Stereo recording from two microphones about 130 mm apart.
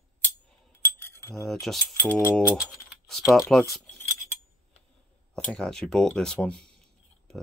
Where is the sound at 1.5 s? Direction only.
Centre (ahead or behind).